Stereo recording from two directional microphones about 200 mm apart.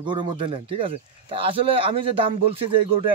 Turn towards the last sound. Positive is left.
turn(degrees=-25)  # may be behind; listen again after turning